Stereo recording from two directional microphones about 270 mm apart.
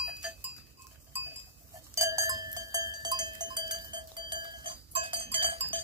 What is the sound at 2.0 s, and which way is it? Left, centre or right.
Cowbell, centre.